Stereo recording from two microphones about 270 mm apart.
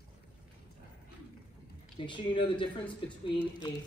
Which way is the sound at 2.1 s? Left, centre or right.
Centre.